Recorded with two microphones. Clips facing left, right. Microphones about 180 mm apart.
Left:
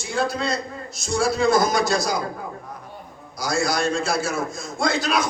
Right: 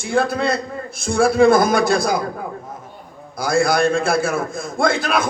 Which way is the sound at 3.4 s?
55° right (ahead or behind).